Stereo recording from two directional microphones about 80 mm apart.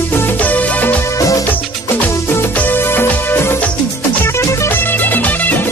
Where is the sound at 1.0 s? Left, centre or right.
Left.